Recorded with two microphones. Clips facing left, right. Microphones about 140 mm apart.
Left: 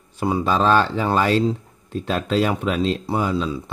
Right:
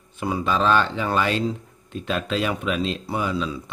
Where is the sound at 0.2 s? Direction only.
35° left (ahead or behind).